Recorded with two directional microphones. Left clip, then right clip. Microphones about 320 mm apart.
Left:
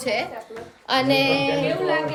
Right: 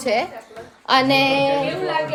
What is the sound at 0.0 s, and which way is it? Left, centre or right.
Speech, centre.